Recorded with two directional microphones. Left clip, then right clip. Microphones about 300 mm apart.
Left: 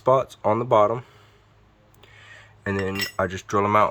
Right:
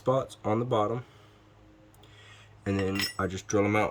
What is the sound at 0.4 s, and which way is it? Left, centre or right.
Cutlery, centre.